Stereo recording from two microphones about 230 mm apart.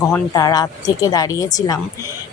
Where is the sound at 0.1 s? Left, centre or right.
Centre.